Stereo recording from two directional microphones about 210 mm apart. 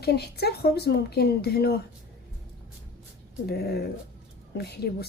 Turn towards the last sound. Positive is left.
turn(degrees=50)  # may be behind; listen again after turning